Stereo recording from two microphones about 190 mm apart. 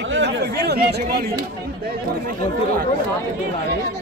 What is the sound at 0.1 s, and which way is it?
Chatter, 65° right (ahead or behind).